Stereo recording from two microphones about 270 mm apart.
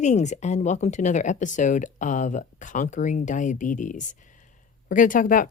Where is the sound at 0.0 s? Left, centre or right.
Left.